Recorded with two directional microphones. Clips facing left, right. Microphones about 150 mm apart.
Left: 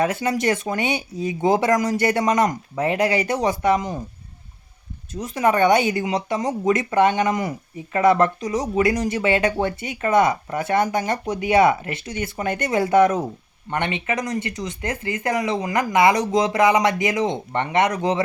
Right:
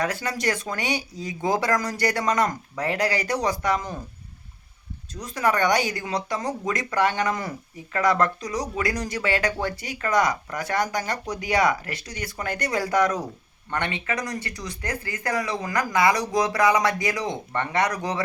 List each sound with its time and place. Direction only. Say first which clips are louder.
0.0 s speech: left 5 dB; 20° left (ahead or behind)
5.1 s speech: left 4 dB; 25° left (ahead or behind)